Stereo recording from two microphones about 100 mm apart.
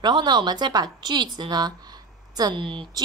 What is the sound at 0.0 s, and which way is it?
A woman's voice, 50° right (ahead or behind).